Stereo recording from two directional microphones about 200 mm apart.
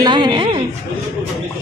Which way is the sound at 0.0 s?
20° right (ahead or behind).